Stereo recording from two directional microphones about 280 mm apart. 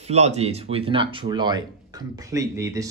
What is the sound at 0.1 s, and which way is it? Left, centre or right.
Speech, right.